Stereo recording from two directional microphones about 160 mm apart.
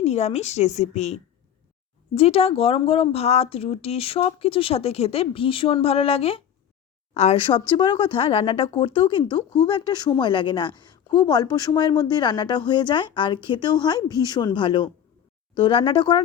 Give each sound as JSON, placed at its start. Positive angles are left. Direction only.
{"t": 0.0, "sound": "a woman's voice", "side_deg": 45}